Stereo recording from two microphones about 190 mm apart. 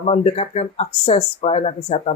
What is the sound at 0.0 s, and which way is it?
Speech, 35° left (ahead or behind).